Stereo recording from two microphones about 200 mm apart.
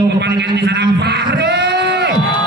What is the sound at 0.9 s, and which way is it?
Music, 55° right (ahead or behind).